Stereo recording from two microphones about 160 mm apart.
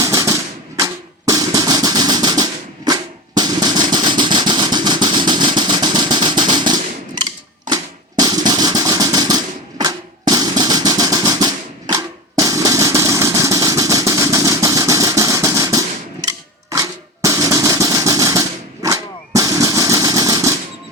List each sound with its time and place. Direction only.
0.0 s music: 20° right (ahead or behind)
0.8 s drum: 25° right (ahead or behind)
7.7 s a sound: 25° right (ahead or behind)
16.2 s drum: 20° right (ahead or behind)